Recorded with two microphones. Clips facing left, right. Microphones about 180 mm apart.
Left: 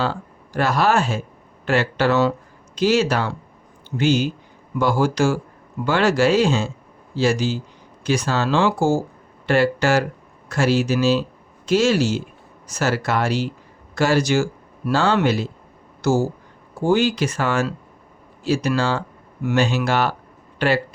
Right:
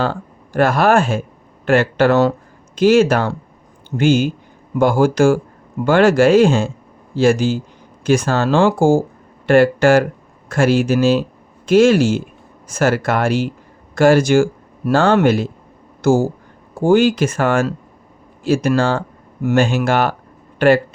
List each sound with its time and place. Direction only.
0.0 s speech: 50° right (ahead or behind)